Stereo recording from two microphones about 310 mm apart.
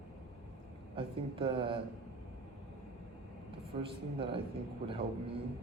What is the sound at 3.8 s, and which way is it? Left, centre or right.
Speech, centre.